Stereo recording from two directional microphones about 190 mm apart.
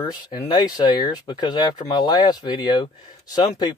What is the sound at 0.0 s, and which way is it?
Speech, 25° left (ahead or behind).